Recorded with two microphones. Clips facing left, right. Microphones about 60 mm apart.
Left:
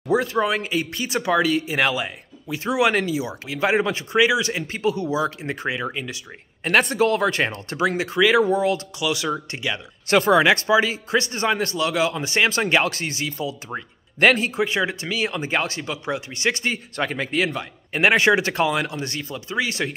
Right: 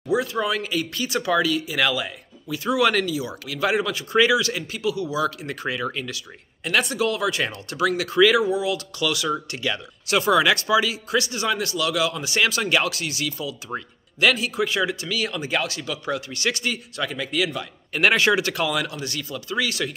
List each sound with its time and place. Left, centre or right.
0.1 s speech: left
6.6 s a man's voice: left
8.4 s a man's voice: left
14.6 s a man's voice: left